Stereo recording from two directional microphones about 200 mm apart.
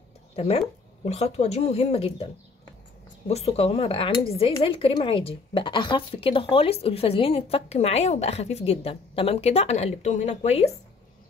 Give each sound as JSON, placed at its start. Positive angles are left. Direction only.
{"t": 0.4, "sound": "speech", "side_deg": 35}
{"t": 3.3, "sound": "speech", "side_deg": 30}